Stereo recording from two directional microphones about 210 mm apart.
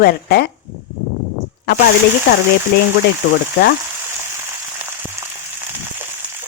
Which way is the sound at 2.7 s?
50° left (ahead or behind).